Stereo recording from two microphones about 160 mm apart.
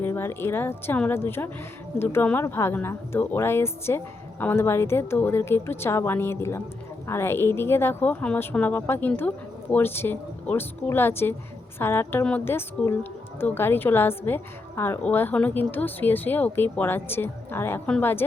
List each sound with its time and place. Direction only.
0.0 s a woman's voice: 15° left (ahead or behind)